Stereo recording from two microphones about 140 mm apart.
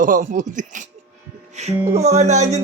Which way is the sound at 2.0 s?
50° right (ahead or behind).